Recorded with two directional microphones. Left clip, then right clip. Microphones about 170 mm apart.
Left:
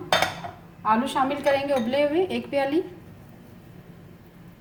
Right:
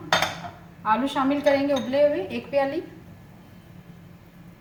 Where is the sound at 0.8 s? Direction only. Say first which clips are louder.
Left 1 dB; 55° left (ahead or behind).